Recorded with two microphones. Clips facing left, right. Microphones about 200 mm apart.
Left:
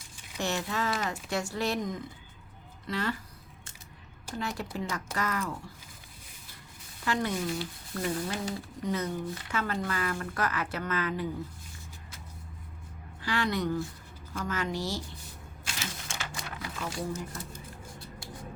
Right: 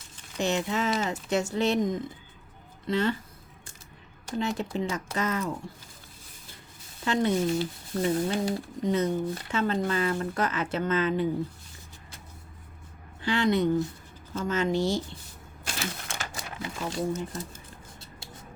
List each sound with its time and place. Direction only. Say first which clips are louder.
0.3 s speech: right 4 dB; 20° right (ahead or behind)
4.4 s speech: right 6 dB; 20° right (ahead or behind)
7.0 s speech: right 5 dB; 25° right (ahead or behind)
13.2 s speech: right 6 dB; 25° right (ahead or behind)
15.6 s a sound: right 5 dB; 60° right (ahead or behind)
16.6 s speech: right 5 dB; 25° right (ahead or behind)